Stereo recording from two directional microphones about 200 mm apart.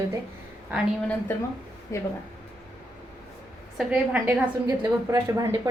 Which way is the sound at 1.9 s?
15° left (ahead or behind).